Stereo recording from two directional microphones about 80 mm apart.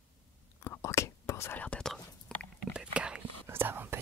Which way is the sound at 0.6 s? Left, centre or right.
Left.